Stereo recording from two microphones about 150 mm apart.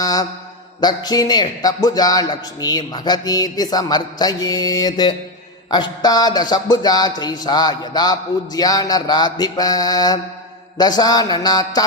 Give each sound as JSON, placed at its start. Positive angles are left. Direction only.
{"t": 0.0, "sound": "mantra", "side_deg": 25}
{"t": 0.8, "sound": "speech", "side_deg": 25}